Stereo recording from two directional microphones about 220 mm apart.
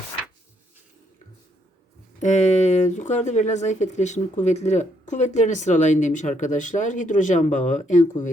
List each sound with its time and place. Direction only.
2.2 s speech: 30° left (ahead or behind)